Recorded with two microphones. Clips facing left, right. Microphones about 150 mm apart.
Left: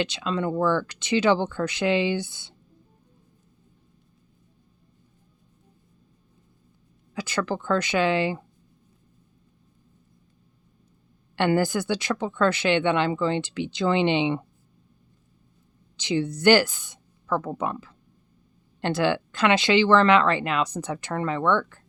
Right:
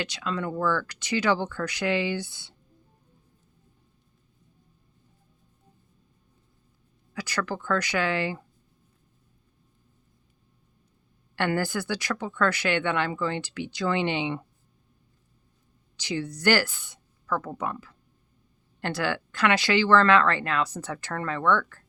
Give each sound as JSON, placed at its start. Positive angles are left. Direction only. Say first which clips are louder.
{"t": 0.0, "sound": "speech", "louder": "left 4 dB", "side_deg": 25}
{"t": 7.1, "sound": "speech", "louder": "left 3 dB", "side_deg": 25}
{"t": 11.3, "sound": "speech", "louder": "left 5 dB", "side_deg": 20}
{"t": 16.0, "sound": "speech", "louder": "left 6 dB", "side_deg": 20}